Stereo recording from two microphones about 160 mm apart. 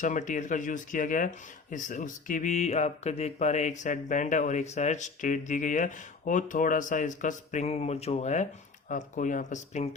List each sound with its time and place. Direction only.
0.0 s speech: 50° left (ahead or behind)